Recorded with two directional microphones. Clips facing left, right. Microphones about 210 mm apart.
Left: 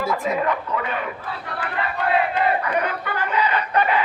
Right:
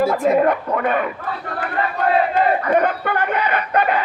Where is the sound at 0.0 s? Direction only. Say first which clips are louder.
Right 7 dB; 55° right (ahead or behind).